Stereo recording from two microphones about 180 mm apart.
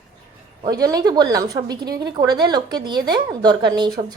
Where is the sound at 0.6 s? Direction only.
20° right (ahead or behind).